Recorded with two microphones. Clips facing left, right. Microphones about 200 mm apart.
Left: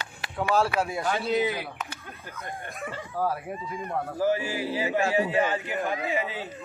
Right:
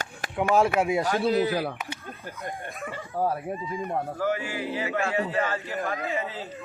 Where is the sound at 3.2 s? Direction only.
25° right (ahead or behind).